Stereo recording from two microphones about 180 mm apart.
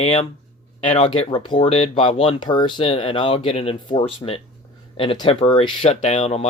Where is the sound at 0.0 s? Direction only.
30° left (ahead or behind).